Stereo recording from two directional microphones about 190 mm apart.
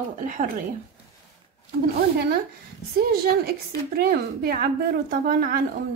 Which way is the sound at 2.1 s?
60° right (ahead or behind).